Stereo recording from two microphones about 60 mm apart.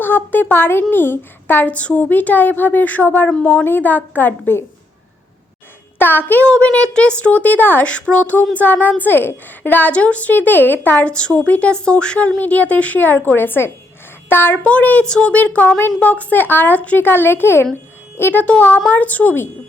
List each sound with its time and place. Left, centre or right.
0.0 s a woman's voice: left
1.6 s a woman's voice: left
6.0 s a woman's voice: left
6.5 s a woman's voice: centre
7.9 s a woman's voice: centre
9.9 s a woman's voice: left
11.0 s a woman's voice: centre; by 14.6 s left
14.6 s a woman's voice: left
17.1 s a woman's voice: left